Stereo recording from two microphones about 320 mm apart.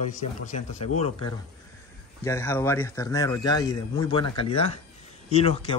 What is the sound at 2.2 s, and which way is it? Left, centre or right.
A man's voice, centre.